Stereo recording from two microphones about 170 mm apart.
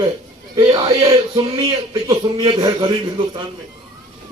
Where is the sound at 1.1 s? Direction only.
25° right (ahead or behind).